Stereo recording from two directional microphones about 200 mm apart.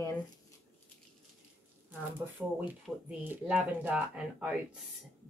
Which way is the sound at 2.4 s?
5° right (ahead or behind).